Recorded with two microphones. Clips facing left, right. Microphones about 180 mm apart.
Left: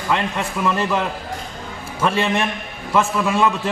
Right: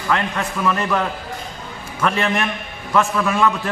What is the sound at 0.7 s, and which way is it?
Speech, 25° left (ahead or behind).